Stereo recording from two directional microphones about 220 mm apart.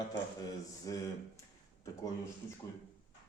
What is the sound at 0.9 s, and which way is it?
Speech, 15° left (ahead or behind).